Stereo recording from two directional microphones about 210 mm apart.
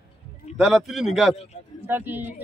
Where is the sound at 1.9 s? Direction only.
10° right (ahead or behind).